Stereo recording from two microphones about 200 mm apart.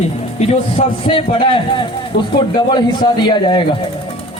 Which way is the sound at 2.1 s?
60° left (ahead or behind).